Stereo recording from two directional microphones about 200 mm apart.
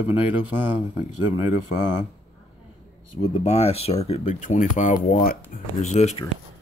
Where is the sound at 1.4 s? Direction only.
35° left (ahead or behind).